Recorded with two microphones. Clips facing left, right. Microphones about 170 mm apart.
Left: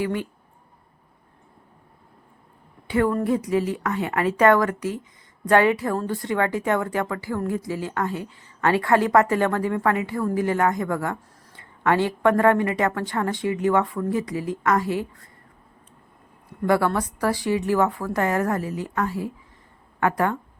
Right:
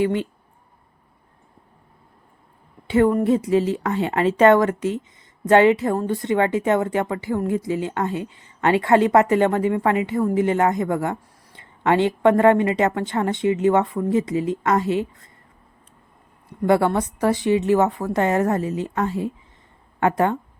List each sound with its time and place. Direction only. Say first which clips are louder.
0.0 s a woman's voice: right 5 dB; 25° right (ahead or behind)
2.8 s a woman's voice: right 4 dB; 25° right (ahead or behind)
16.6 s a woman's voice: right 3 dB; 25° right (ahead or behind)